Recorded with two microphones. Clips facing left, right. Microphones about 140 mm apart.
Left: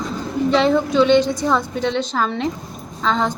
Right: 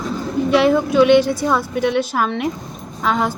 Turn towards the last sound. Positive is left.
turn(degrees=-10)  # may be behind; listen again after turning